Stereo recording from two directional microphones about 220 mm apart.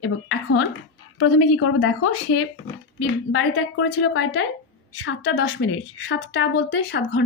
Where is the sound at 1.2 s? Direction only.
90° left; by 4.5 s 70° left (ahead or behind).